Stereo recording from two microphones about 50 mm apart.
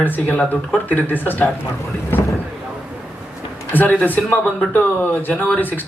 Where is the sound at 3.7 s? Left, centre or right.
Left.